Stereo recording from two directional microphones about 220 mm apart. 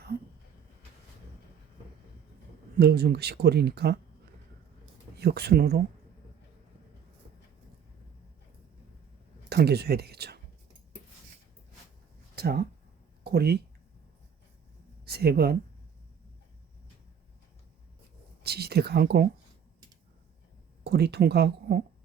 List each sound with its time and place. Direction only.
2.7 s speech: 45° right (ahead or behind)
5.1 s speech: 45° right (ahead or behind)
9.5 s speech: 45° right (ahead or behind)
12.4 s speech: 45° right (ahead or behind)
15.0 s speech: 45° right (ahead or behind)
18.4 s speech: 45° right (ahead or behind)
20.8 s speech: 45° right (ahead or behind)